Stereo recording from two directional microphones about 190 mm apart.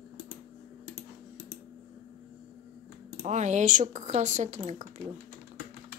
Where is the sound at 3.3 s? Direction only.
40° right (ahead or behind).